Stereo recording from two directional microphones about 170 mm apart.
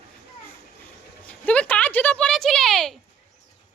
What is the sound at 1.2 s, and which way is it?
A woman's voice, 5° left (ahead or behind).